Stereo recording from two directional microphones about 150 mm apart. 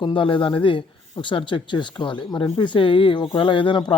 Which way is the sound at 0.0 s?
35° left (ahead or behind).